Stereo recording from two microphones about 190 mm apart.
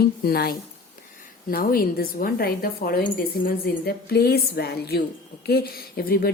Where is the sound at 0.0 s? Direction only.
55° left (ahead or behind).